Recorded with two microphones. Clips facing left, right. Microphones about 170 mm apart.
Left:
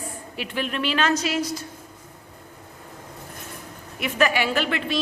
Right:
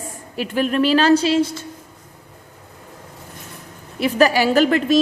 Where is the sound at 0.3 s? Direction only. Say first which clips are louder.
Right 9 dB; 40° right (ahead or behind); by 1.6 s 25° right (ahead or behind).